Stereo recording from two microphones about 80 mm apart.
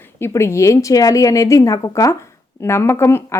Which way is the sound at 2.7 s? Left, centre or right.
Left.